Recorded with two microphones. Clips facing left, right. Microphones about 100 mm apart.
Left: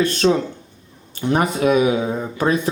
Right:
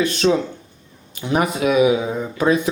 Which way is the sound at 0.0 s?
40° left (ahead or behind).